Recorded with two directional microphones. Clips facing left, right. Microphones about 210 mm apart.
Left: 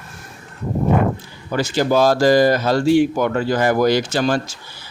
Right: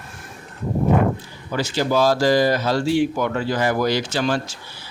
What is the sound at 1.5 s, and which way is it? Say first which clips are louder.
Speech: left 3 dB; 50° left (ahead or behind).